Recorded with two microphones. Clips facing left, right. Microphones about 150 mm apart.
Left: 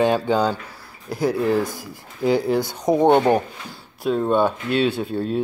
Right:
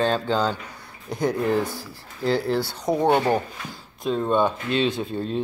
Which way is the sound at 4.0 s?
10° left (ahead or behind).